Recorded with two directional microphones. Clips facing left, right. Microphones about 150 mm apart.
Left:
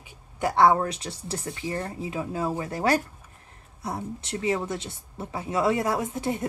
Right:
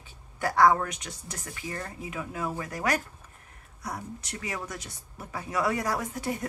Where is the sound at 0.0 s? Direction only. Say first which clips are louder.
Left 4 dB; 20° left (ahead or behind).